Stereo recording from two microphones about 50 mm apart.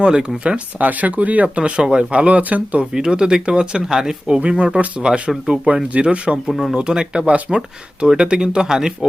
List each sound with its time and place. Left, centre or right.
0.0 s speech: centre
0.4 s speech: right
2.9 s speech: centre
4.4 s speech: right
6.5 s speech: centre
6.7 s speech: centre